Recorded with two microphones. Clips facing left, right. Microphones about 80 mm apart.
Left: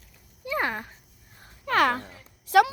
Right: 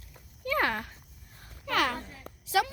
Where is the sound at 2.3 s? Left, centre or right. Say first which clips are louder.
Right 12 dB; right.